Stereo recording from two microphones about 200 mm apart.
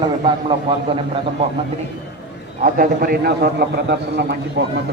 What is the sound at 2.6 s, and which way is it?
A man's voice, 45° right (ahead or behind).